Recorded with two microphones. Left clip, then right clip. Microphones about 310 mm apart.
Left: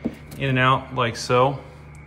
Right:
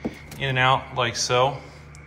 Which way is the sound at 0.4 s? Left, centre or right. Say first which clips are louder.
Left 1 dB; centre.